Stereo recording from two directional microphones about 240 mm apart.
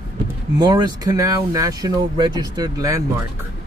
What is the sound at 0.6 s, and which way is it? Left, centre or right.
Speech, centre.